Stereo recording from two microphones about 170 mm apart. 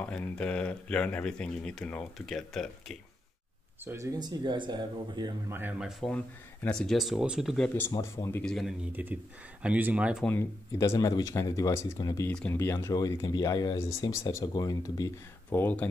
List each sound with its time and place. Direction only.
0.0 s speech: 10° left (ahead or behind)
3.8 s speech: 15° right (ahead or behind)
5.5 s speech: 5° right (ahead or behind); by 8.5 s 15° left (ahead or behind)
8.5 s speech: centre (ahead or behind)
8.9 s speech: 10° right (ahead or behind)
10.2 s speech: 15° left (ahead or behind)
12.3 s speech: 5° left (ahead or behind)